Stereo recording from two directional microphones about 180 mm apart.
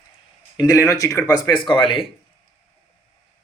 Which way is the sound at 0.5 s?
20° left (ahead or behind).